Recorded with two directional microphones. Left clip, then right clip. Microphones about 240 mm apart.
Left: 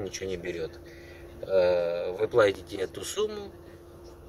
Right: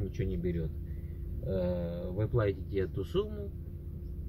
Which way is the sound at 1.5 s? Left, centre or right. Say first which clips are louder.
Left 12 dB; left.